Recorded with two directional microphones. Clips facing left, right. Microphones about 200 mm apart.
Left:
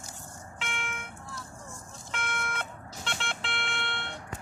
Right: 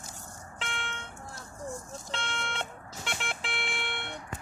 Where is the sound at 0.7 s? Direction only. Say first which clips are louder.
Left 2 dB; 35° right (ahead or behind).